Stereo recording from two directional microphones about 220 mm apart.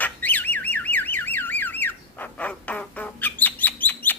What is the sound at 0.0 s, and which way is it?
Car alarm, 10° left (ahead or behind).